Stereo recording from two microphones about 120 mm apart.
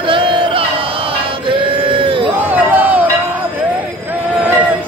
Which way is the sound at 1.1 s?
45° right (ahead or behind).